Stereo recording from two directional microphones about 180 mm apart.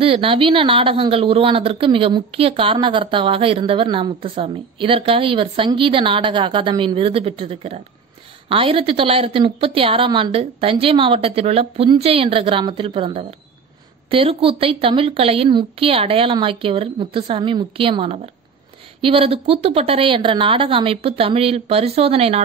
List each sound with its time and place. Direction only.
0.0 s a woman's voice: 30° right (ahead or behind)